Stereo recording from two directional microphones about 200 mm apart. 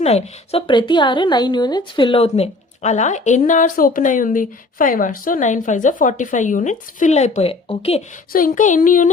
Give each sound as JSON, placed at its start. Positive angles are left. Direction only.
{"t": 0.0, "sound": "a woman's voice", "side_deg": 30}
{"t": 8.3, "sound": "a woman's voice", "side_deg": 45}